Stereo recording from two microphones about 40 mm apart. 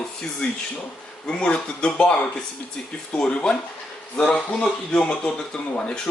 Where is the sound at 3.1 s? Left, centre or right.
Left.